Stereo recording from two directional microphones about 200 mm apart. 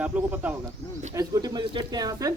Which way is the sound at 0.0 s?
10° right (ahead or behind).